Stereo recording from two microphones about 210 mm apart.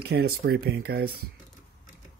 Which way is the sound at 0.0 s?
50° right (ahead or behind).